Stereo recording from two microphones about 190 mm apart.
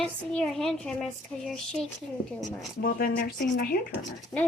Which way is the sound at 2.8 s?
50° left (ahead or behind).